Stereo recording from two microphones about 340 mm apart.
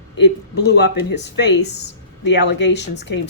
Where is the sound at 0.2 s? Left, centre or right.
Left.